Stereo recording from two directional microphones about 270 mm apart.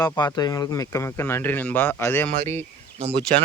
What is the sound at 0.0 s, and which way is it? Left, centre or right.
Speech, centre.